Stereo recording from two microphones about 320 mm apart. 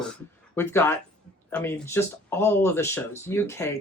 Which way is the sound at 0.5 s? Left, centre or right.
Centre.